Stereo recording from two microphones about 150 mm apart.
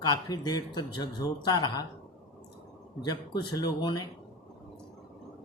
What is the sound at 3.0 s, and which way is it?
Speech, 30° left (ahead or behind).